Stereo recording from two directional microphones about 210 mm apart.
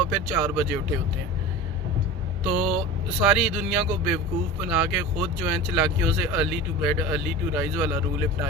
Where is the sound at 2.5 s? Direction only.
Centre (ahead or behind).